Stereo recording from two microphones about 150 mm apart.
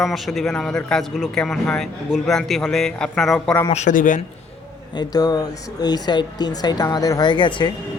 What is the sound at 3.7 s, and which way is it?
Speech, 55° left (ahead or behind).